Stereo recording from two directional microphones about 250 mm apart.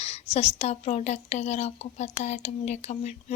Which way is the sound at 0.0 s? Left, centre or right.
Left.